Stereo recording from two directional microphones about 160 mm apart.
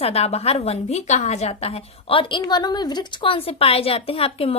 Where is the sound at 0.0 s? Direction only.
40° left (ahead or behind).